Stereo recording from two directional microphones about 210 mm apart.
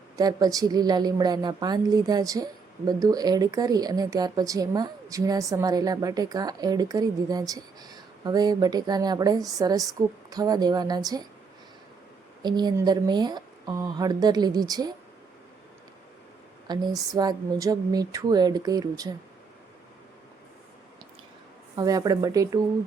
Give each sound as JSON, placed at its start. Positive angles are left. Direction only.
{"t": 0.2, "sound": "a woman's voice", "side_deg": -20}
{"t": 12.4, "sound": "speech", "side_deg": -20}
{"t": 16.6, "sound": "speech", "side_deg": -20}
{"t": 21.8, "sound": "a woman's voice", "side_deg": -15}